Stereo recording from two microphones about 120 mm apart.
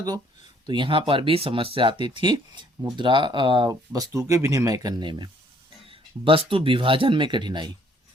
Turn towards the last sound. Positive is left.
turn(degrees=-40)  # may be behind; listen again after turning